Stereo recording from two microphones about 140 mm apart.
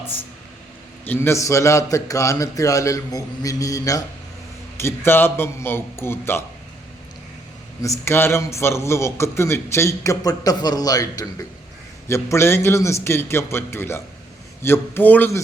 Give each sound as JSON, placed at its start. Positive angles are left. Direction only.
{"t": 1.0, "sound": "a man's voice", "side_deg": 15}
{"t": 7.8, "sound": "a man's voice", "side_deg": 20}